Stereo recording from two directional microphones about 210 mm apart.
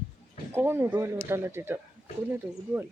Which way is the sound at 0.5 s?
10° right (ahead or behind).